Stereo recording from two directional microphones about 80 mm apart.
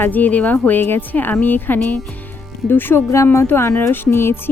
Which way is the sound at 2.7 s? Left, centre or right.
Left.